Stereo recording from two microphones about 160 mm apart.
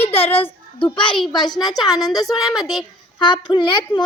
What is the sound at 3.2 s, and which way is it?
Speech, 30° left (ahead or behind).